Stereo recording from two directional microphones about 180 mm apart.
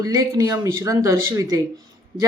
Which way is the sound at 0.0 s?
20° right (ahead or behind).